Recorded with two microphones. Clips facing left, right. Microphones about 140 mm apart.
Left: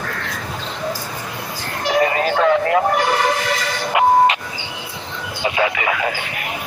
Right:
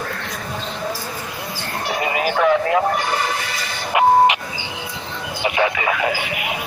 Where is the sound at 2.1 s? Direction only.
15° right (ahead or behind).